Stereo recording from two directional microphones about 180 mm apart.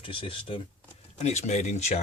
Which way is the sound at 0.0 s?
30° left (ahead or behind).